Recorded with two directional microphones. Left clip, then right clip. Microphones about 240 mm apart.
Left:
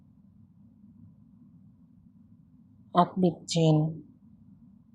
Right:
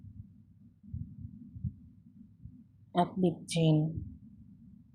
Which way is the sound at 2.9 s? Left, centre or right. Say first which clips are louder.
Left 6 dB; centre.